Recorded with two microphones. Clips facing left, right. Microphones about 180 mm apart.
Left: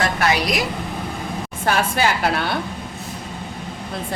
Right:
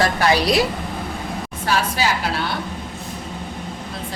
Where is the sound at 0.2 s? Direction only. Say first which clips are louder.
Right 3 dB; 30° right (ahead or behind).